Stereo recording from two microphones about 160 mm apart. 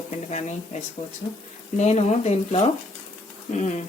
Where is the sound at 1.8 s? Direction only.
45° left (ahead or behind).